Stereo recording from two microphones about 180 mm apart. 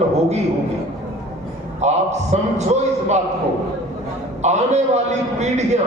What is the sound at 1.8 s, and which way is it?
Speech, 40° right (ahead or behind).